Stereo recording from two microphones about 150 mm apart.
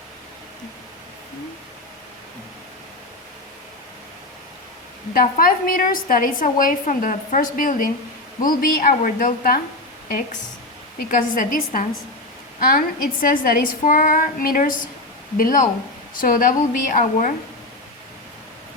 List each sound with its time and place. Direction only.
5.1 s a woman's voice: 70° left (ahead or behind)
11.1 s a woman's voice: 70° left (ahead or behind)